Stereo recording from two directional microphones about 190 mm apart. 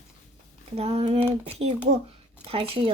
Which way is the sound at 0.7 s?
30° right (ahead or behind).